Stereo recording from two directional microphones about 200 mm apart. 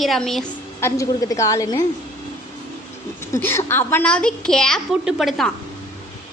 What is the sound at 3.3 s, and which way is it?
A woman's voice, 15° left (ahead or behind).